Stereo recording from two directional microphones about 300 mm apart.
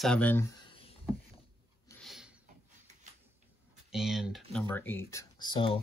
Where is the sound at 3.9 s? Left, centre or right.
Centre.